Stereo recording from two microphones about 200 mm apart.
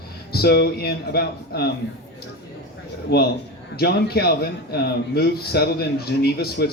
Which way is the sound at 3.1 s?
50° left (ahead or behind).